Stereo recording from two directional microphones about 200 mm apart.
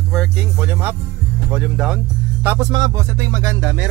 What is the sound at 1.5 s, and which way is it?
Speech, 5° right (ahead or behind).